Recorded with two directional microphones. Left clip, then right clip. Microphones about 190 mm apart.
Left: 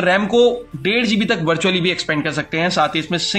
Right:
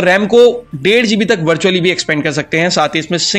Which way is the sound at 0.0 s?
30° right (ahead or behind).